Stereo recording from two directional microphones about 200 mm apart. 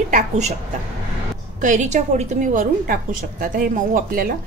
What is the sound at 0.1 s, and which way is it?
Speech, 35° right (ahead or behind).